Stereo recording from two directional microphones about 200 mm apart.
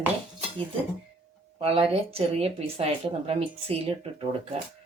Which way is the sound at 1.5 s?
30° right (ahead or behind).